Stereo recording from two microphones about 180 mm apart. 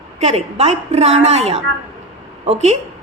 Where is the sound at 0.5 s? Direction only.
35° right (ahead or behind).